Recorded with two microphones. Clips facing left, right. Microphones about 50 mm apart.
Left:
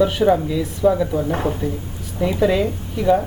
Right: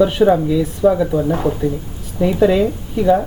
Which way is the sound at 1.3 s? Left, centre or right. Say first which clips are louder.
Right 4 dB; left.